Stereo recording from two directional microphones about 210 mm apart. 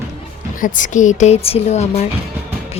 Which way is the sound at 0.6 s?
40° left (ahead or behind).